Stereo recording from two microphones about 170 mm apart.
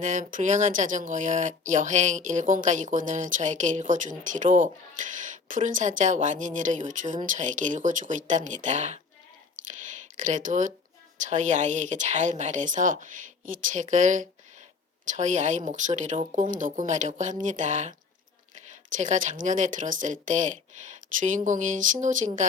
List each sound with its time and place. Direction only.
0.0 s speech: 50° right (ahead or behind)
10.2 s speech: 50° right (ahead or behind)
18.9 s speech: 45° right (ahead or behind)